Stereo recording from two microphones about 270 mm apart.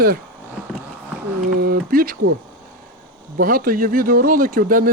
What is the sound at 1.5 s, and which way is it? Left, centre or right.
Speech, right.